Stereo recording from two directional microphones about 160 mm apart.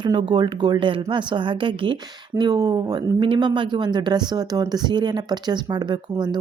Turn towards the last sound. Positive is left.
turn(degrees=-25)  # may be behind; listen again after turning